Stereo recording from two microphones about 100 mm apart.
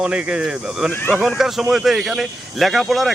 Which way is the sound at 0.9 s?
20° left (ahead or behind).